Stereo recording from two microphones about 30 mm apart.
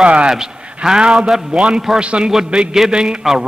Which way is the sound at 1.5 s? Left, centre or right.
Right.